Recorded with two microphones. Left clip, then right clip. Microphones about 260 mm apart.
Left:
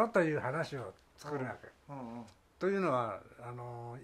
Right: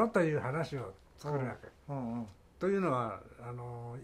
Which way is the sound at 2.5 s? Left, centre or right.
Left.